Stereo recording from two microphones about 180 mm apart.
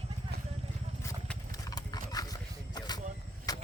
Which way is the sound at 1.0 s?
15° left (ahead or behind).